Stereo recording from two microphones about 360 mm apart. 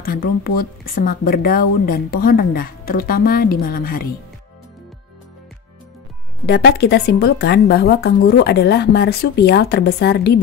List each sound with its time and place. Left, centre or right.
0.0 s speech: left
6.4 s speech: left